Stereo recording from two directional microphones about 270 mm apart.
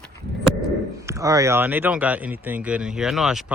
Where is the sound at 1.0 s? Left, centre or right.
Centre.